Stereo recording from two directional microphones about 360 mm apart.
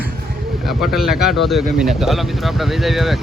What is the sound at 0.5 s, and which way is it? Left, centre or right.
Bird, centre.